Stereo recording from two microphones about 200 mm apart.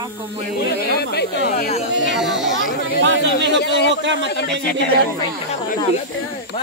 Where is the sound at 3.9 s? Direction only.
65° right (ahead or behind).